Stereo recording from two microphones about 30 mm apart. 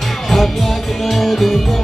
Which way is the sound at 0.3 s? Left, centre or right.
Centre.